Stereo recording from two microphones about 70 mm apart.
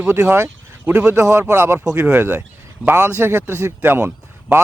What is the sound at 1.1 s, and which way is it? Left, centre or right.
Speech, right.